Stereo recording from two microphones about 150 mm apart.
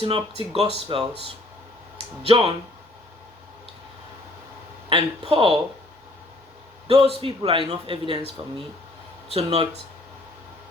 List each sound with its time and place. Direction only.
0.0 s speech: 40° right (ahead or behind)
2.2 s speech: 40° right (ahead or behind)
4.9 s speech: 40° right (ahead or behind)
6.8 s a man's voice: 40° right (ahead or behind)
9.3 s speech: 40° right (ahead or behind)